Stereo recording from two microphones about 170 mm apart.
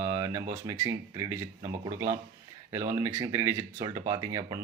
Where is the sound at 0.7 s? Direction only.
20° right (ahead or behind).